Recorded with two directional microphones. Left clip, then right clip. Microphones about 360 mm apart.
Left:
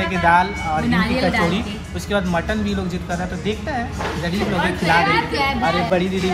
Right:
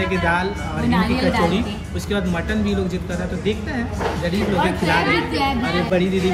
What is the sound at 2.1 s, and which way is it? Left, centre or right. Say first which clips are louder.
Speech: left 3 dB; centre.